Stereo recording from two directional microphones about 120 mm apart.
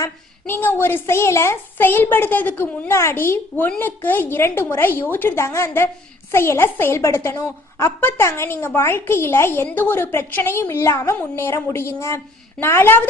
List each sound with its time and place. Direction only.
0.0 s a child's voice: 15° left (ahead or behind)